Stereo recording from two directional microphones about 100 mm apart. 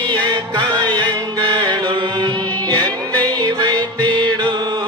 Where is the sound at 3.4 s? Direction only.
45° right (ahead or behind).